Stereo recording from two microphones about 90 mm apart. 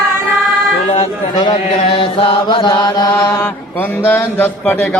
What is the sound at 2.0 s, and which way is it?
Mantra, 90° left.